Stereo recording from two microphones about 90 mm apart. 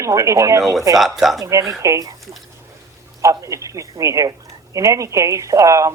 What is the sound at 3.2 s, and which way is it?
A man's voice, 35° right (ahead or behind).